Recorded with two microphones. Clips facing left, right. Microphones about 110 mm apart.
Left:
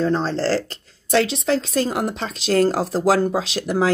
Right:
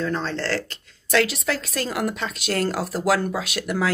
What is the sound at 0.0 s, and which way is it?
Speech, 35° left (ahead or behind).